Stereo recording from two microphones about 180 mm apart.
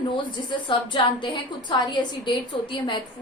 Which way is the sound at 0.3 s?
25° left (ahead or behind).